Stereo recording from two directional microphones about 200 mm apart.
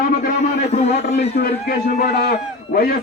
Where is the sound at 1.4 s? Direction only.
50° left (ahead or behind).